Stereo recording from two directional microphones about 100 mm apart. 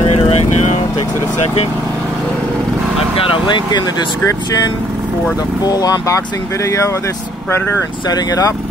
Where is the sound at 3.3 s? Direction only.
50° left (ahead or behind).